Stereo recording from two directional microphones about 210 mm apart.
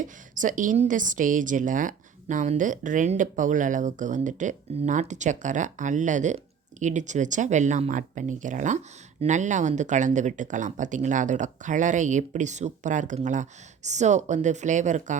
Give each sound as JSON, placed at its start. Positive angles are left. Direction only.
{"t": 0.0, "sound": "a woman's voice", "side_deg": -40}